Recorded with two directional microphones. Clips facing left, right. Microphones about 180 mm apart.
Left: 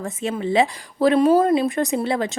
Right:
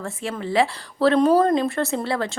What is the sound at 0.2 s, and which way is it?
A woman's voice, 20° left (ahead or behind).